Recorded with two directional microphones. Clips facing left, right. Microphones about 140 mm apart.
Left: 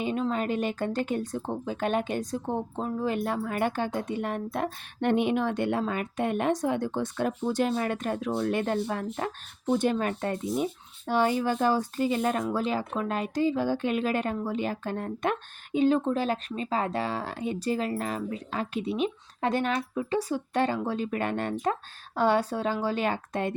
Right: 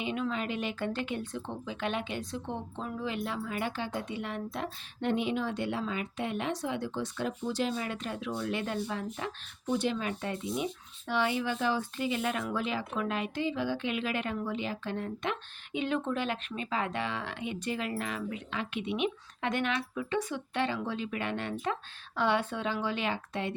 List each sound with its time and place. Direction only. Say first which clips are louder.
0.0 s a woman's voice: left 5 dB; 40° left (ahead or behind)